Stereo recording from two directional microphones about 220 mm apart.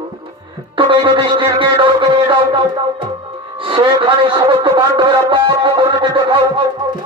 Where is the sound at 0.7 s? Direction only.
20° right (ahead or behind).